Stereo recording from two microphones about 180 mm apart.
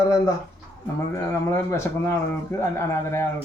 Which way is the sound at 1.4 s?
15° left (ahead or behind).